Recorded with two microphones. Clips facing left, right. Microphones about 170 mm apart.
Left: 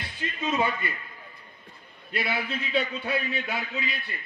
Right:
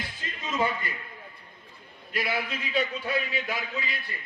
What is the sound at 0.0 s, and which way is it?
Music, 65° left (ahead or behind).